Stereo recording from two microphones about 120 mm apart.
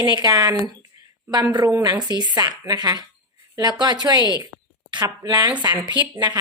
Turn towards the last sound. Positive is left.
turn(degrees=-40)  # may be behind; listen again after turning